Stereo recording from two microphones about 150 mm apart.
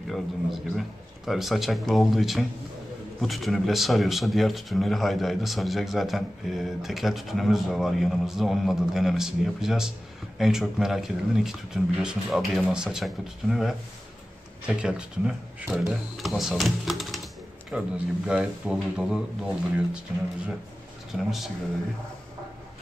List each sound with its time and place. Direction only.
0.1 s speech: centre (ahead or behind)
21.1 s speech: centre (ahead or behind)